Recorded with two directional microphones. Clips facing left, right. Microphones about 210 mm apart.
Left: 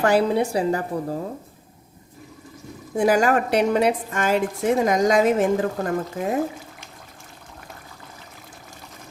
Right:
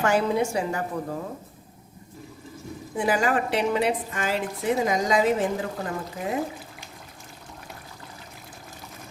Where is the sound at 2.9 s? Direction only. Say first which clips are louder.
Left 5 dB; 45° left (ahead or behind).